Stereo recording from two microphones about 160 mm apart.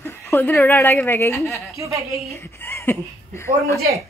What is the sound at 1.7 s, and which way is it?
Speech, 20° right (ahead or behind).